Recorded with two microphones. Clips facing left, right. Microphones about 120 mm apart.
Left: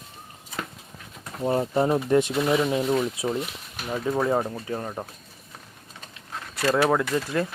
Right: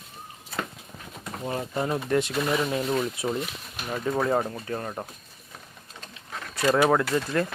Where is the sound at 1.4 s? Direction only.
30° left (ahead or behind).